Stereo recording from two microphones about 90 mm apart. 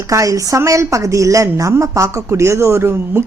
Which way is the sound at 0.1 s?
40° right (ahead or behind).